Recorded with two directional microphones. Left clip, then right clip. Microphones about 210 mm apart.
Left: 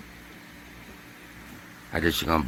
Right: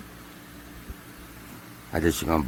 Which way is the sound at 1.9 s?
15° right (ahead or behind).